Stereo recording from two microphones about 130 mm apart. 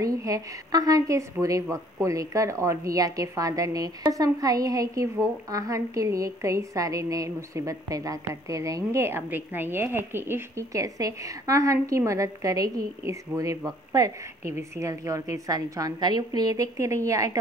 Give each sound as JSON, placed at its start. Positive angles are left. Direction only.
{"t": 0.0, "sound": "a woman's voice", "side_deg": -25}